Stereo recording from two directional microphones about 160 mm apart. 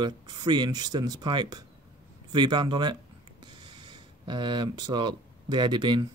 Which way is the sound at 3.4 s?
30° right (ahead or behind).